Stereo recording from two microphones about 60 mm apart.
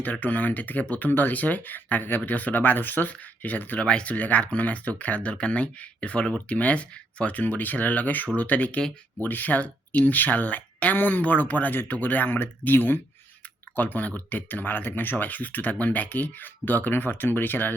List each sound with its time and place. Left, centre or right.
0.0 s speech: left